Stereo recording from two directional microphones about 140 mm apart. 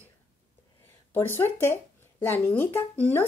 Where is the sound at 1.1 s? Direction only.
15° left (ahead or behind).